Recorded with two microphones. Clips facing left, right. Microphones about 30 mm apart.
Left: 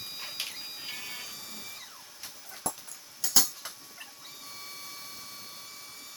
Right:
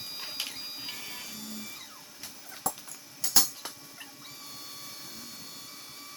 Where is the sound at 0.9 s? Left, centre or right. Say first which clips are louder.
Left 1 dB; centre.